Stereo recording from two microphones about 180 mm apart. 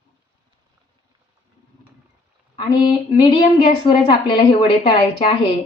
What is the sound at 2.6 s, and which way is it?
A woman's voice, 25° left (ahead or behind).